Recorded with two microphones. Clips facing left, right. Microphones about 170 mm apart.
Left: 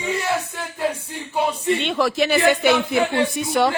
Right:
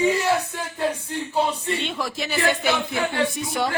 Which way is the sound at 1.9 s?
70° left (ahead or behind).